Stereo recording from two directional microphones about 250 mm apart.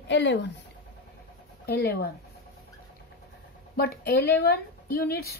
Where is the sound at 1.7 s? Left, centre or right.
Left.